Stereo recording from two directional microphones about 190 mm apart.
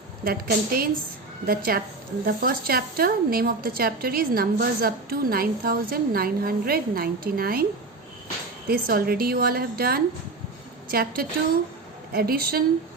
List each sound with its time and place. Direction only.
0.3 s speech: 50° right (ahead or behind)
8.6 s speech: 50° right (ahead or behind)